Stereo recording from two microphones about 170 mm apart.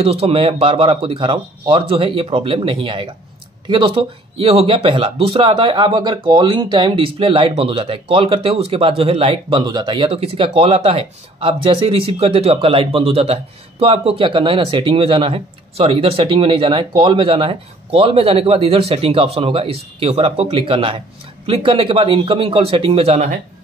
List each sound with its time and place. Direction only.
0.0 s speech: 35° right (ahead or behind)